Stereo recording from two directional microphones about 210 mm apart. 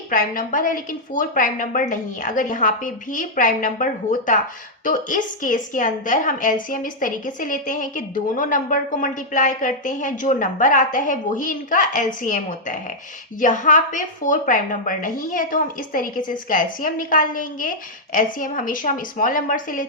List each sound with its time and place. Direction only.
0.1 s a woman's voice: 40° left (ahead or behind)